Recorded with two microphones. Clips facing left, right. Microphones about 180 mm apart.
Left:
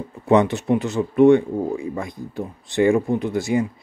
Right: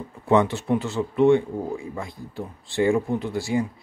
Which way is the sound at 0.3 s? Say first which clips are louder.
Left 3 dB; 20° left (ahead or behind).